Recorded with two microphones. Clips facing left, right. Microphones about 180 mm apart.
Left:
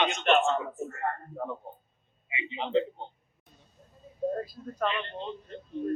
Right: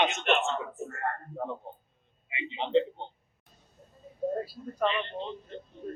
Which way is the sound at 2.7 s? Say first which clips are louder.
Right 2 dB; 5° left (ahead or behind).